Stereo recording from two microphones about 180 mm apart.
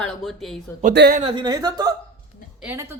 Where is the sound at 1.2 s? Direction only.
25° right (ahead or behind).